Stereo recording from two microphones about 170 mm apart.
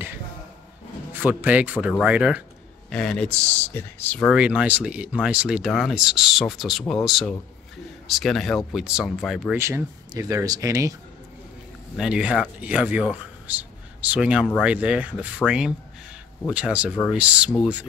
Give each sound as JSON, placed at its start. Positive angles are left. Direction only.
{"t": 1.1, "sound": "speech", "side_deg": -10}
{"t": 2.9, "sound": "a man's voice", "side_deg": 5}
{"t": 4.4, "sound": "speech", "side_deg": -5}
{"t": 9.6, "sound": "speech", "side_deg": -15}
{"t": 12.0, "sound": "speech", "side_deg": -5}